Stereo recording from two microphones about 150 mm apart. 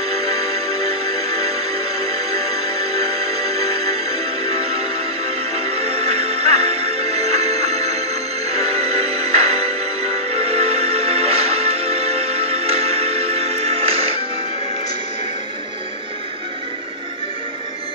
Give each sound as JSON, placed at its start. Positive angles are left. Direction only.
{"t": 0.1, "sound": "music", "side_deg": -40}